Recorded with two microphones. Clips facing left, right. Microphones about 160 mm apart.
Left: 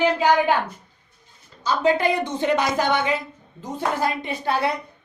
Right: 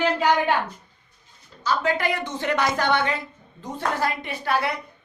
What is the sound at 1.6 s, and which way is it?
A woman's voice, 20° left (ahead or behind).